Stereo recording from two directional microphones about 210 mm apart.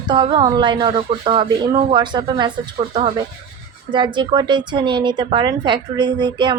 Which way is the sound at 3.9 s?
20° right (ahead or behind).